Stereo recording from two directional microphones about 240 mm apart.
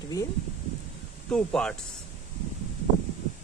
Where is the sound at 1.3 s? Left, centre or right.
Centre.